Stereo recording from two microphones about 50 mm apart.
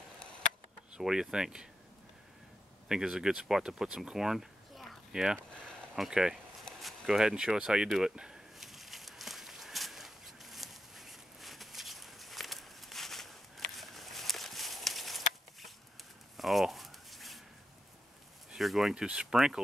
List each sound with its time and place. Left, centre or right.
1.0 s speech: centre
2.9 s speech: centre
8.5 s walk: centre
13.7 s a sound: centre
18.6 s speech: centre
18.9 s speech: centre